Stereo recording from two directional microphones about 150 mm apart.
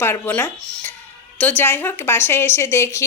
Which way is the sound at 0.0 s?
15° left (ahead or behind).